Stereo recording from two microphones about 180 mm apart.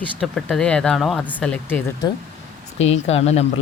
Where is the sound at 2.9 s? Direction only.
35° left (ahead or behind).